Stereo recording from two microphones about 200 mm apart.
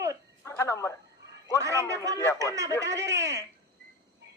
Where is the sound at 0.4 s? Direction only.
15° left (ahead or behind).